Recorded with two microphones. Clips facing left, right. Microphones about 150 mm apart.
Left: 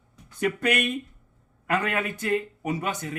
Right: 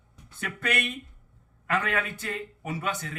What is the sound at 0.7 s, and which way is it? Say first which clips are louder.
Speech: left 5 dB; 15° left (ahead or behind).